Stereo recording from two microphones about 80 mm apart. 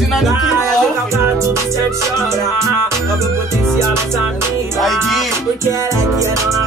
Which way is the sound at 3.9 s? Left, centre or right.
Right.